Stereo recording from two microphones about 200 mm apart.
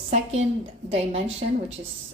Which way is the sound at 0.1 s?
35° right (ahead or behind).